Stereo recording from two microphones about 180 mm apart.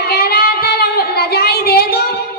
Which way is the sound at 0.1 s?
55° left (ahead or behind).